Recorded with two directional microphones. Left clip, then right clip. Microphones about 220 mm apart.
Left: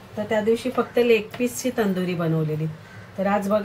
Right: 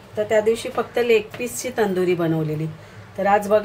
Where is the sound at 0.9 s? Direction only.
30° right (ahead or behind).